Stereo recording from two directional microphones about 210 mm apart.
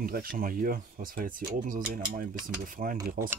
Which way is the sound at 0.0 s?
45° right (ahead or behind).